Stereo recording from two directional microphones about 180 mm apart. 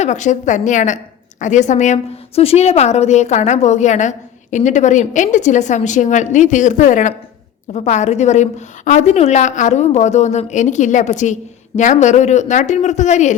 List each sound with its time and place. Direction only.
0.0 s a woman's voice: 40° left (ahead or behind)